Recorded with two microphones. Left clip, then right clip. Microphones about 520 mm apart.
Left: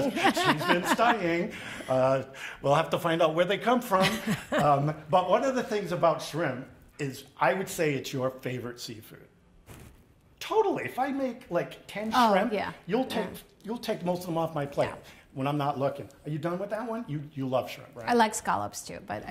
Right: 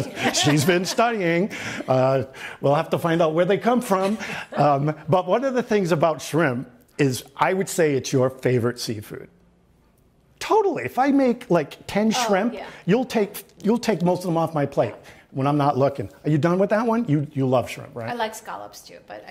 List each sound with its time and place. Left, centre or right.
0.2 s speech: left
0.9 s speech: right
10.4 s speech: right
18.0 s a woman's voice: left